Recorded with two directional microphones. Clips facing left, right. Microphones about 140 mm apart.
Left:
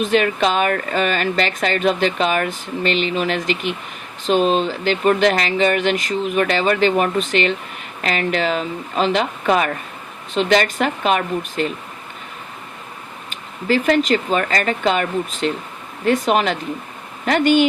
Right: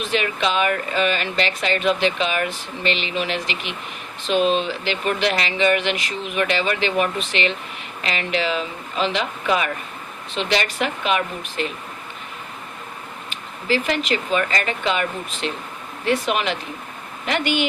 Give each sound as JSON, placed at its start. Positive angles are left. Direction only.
{"t": 0.0, "sound": "speech", "side_deg": 45}
{"t": 13.3, "sound": "speech", "side_deg": 50}